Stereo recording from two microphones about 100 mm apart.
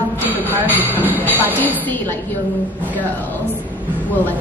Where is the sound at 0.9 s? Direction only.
20° right (ahead or behind).